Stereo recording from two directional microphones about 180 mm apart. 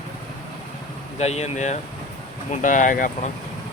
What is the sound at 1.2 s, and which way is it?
Speech, 35° left (ahead or behind).